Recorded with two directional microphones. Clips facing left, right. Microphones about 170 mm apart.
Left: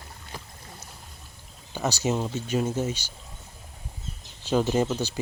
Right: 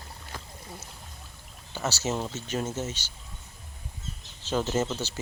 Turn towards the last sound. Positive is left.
turn(degrees=15)  # may be behind; listen again after turning